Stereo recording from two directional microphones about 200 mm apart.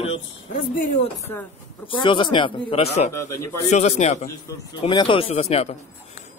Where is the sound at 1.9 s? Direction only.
25° left (ahead or behind).